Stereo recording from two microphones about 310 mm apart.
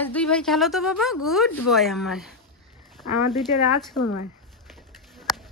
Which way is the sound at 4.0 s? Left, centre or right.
Left.